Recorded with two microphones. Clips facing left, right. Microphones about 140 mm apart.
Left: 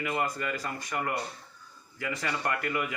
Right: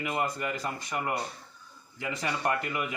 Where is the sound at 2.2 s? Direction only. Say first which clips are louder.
Right 3 dB; 20° right (ahead or behind).